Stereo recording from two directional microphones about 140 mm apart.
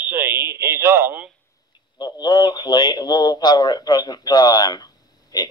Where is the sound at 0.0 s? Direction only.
15° right (ahead or behind).